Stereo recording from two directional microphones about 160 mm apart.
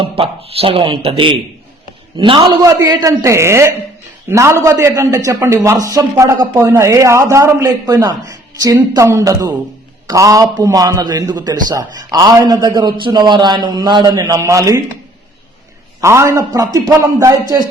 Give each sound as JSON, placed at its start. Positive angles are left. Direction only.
{"t": 0.0, "sound": "speech", "side_deg": -35}
{"t": 2.6, "sound": "a man's voice", "side_deg": -20}
{"t": 16.0, "sound": "a man's voice", "side_deg": -20}